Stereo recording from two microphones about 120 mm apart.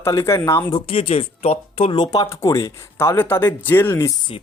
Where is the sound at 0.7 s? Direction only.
50° left (ahead or behind).